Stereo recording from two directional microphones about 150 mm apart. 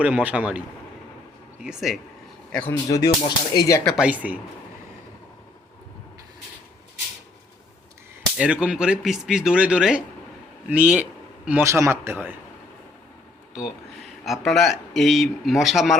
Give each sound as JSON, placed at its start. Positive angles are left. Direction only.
{"t": 0.0, "sound": "a man's voice", "side_deg": -10}
{"t": 1.6, "sound": "speech", "side_deg": 0}
{"t": 2.5, "sound": "speech", "side_deg": 10}
{"t": 2.9, "sound": "speech", "side_deg": 25}
{"t": 3.8, "sound": "a man's voice", "side_deg": -5}
{"t": 8.4, "sound": "a man's voice", "side_deg": -5}
{"t": 14.3, "sound": "speech", "side_deg": 0}